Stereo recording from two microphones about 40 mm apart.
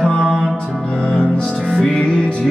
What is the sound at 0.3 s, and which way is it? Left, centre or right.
Music, centre.